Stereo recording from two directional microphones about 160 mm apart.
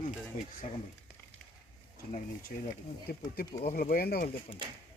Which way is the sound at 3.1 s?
75° left (ahead or behind).